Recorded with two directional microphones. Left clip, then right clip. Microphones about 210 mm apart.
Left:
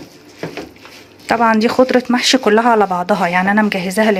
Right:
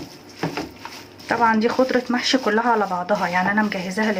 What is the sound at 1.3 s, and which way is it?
Speech, 50° left (ahead or behind).